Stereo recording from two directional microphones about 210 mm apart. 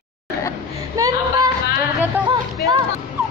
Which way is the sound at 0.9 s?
15° right (ahead or behind).